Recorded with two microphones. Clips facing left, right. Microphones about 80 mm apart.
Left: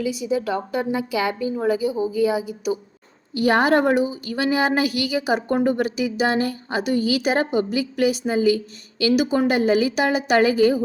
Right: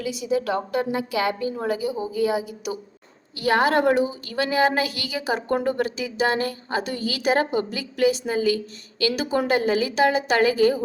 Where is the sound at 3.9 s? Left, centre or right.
Right.